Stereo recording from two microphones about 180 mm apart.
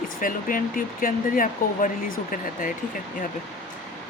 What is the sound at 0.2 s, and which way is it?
Speech, 50° left (ahead or behind).